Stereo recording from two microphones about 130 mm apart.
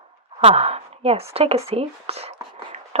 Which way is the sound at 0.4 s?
50° right (ahead or behind).